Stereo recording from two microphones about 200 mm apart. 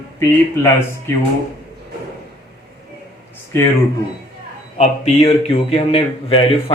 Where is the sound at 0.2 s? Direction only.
15° left (ahead or behind).